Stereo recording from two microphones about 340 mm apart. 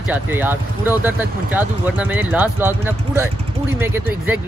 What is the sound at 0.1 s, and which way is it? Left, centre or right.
Speech, centre.